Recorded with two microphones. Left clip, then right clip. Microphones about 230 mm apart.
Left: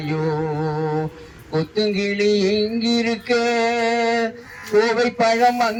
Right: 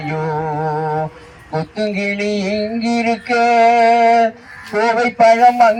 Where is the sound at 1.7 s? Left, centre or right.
Centre.